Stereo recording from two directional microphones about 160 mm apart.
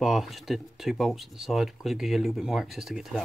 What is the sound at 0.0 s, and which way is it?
Speech, centre (ahead or behind).